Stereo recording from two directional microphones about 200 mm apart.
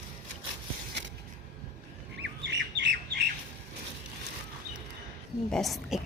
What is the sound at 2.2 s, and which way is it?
Bird, 60° right (ahead or behind).